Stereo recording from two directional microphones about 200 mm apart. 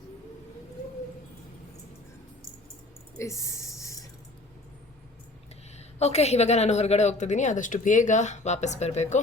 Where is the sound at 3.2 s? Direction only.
15° left (ahead or behind).